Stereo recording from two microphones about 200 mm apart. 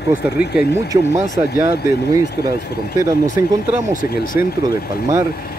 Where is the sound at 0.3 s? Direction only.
55° left (ahead or behind).